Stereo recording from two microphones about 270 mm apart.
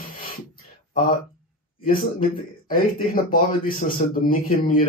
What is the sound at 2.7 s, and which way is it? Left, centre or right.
Speech, left.